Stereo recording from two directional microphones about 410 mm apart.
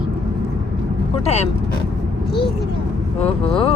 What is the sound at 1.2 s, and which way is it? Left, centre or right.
Speech, centre.